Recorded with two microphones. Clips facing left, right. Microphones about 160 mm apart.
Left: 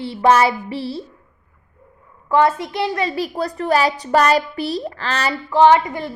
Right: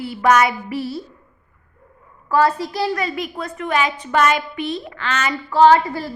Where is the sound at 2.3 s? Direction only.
25° left (ahead or behind).